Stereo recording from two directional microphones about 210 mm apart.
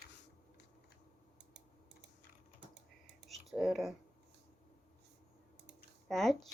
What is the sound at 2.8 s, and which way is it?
Typing, 55° right (ahead or behind).